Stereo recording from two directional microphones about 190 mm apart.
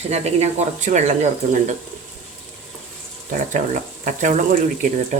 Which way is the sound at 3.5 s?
40° right (ahead or behind).